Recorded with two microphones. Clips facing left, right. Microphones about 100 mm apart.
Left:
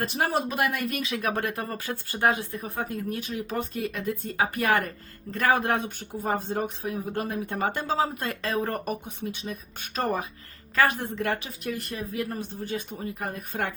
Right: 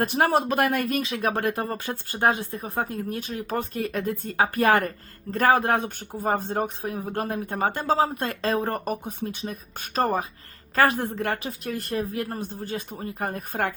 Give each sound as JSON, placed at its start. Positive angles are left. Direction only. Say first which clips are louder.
{"t": 0.0, "sound": "a woman's voice", "louder": "right 5 dB", "side_deg": -55}